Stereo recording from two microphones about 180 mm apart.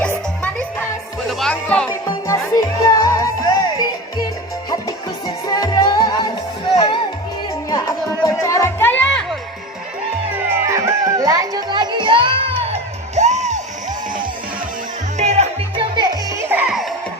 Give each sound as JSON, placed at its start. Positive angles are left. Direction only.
{"t": 0.0, "sound": "music", "side_deg": 10}
{"t": 2.2, "sound": "music", "side_deg": 15}
{"t": 5.5, "sound": "music", "side_deg": 20}
{"t": 10.3, "sound": "music", "side_deg": -15}
{"t": 15.2, "sound": "music", "side_deg": -35}
{"t": 16.5, "sound": "music", "side_deg": -5}